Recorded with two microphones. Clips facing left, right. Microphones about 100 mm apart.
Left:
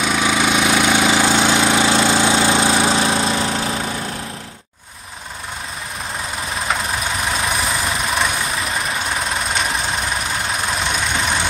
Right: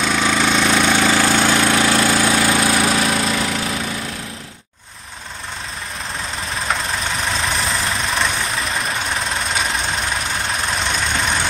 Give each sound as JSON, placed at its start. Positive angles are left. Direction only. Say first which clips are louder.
{"t": 0.0, "sound": "engine", "louder": "even", "side_deg": 10}
{"t": 7.6, "sound": "vehicle", "louder": "left 1 dB", "side_deg": 0}
{"t": 10.9, "sound": "vehicle", "louder": "even", "side_deg": 0}